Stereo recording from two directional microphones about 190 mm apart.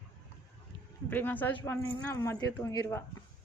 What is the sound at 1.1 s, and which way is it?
Speech, 10° left (ahead or behind).